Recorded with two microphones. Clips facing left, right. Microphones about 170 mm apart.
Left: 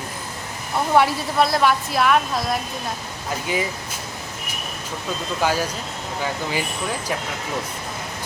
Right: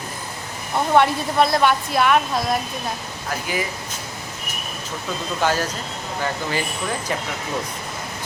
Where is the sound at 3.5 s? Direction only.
25° left (ahead or behind).